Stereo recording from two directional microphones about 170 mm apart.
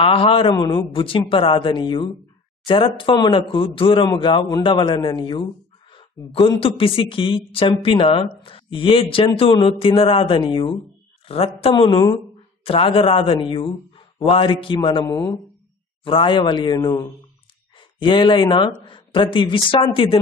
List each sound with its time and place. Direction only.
0.0 s a man's voice: 30° left (ahead or behind)
16.0 s speech: 30° left (ahead or behind)